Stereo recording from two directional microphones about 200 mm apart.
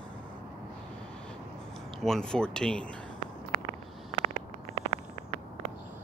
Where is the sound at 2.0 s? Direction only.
5° left (ahead or behind).